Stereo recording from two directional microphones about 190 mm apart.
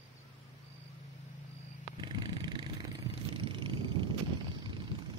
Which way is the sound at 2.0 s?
25° right (ahead or behind).